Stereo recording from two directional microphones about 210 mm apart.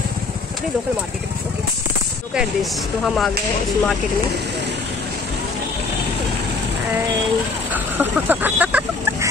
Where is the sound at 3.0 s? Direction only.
Centre (ahead or behind).